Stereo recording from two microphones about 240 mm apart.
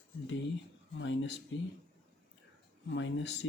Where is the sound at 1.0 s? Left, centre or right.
Left.